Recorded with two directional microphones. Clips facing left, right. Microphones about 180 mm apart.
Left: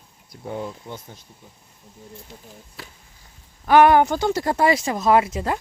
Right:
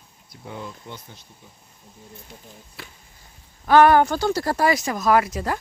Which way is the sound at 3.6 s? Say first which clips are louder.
Even; 15° left (ahead or behind).